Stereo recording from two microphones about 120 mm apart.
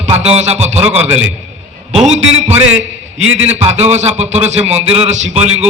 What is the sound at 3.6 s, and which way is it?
A man's voice, 65° right (ahead or behind).